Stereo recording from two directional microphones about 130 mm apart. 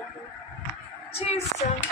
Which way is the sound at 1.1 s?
55° left (ahead or behind).